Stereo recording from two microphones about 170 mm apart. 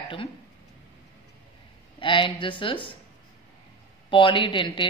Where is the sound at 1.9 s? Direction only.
30° left (ahead or behind).